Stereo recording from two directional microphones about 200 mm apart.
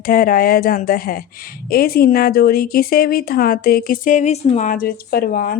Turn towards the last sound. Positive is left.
turn(degrees=45)  # may be behind; listen again after turning